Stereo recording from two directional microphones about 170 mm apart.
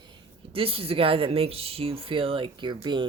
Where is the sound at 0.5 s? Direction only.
35° right (ahead or behind).